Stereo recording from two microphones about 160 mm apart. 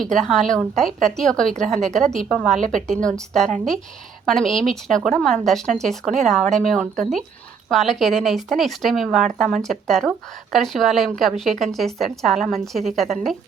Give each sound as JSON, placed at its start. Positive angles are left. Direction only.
{"t": 0.0, "sound": "a woman's voice", "side_deg": 5}
{"t": 2.6, "sound": "a woman's voice", "side_deg": -55}
{"t": 3.0, "sound": "a woman's voice", "side_deg": 5}